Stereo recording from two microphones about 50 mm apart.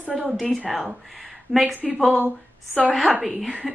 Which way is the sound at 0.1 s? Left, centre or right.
Centre.